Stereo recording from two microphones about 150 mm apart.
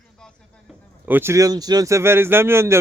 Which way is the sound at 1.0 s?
15° right (ahead or behind).